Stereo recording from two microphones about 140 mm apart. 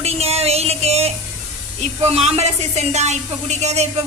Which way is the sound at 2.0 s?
45° right (ahead or behind).